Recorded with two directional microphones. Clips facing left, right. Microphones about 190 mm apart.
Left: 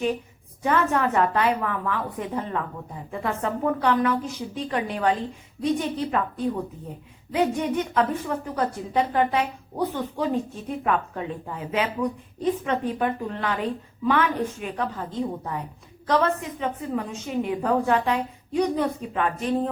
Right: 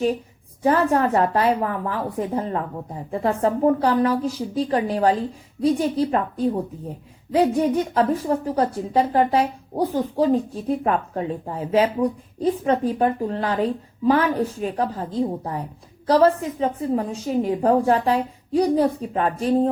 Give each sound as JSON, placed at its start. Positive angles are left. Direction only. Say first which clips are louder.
{"t": 0.6, "sound": "a woman's voice", "louder": "right 4 dB", "side_deg": -35}